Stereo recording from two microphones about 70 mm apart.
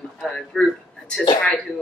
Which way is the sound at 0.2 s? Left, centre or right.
Centre.